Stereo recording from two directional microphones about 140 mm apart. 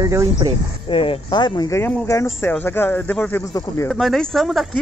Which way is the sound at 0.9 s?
40° left (ahead or behind).